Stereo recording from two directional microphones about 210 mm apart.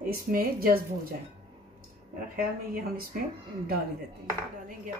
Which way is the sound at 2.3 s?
45° right (ahead or behind).